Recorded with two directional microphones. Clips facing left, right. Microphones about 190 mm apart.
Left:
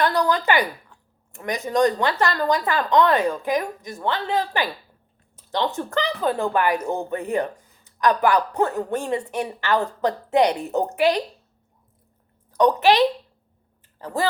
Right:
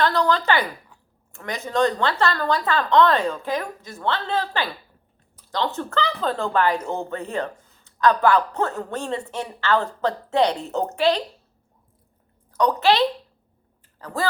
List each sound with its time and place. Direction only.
0.0 s speech: 15° left (ahead or behind)
12.5 s a woman's voice: 20° left (ahead or behind)